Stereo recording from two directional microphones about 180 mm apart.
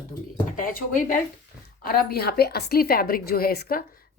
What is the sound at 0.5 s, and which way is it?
A woman's voice, 50° left (ahead or behind).